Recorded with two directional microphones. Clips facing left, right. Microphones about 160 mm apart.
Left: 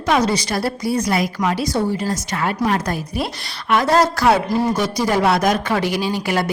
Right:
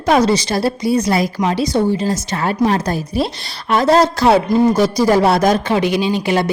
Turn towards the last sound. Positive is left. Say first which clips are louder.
# right 4 dB
turn(degrees=-25)  # may be behind; listen again after turning